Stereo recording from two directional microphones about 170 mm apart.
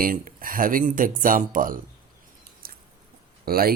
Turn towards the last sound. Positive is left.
turn(degrees=-60)  # may be behind; listen again after turning